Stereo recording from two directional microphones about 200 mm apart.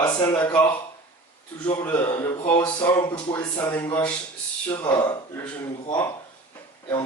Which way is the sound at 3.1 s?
10° left (ahead or behind).